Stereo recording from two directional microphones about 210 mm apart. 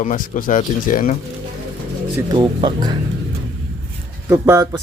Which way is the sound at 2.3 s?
20° right (ahead or behind).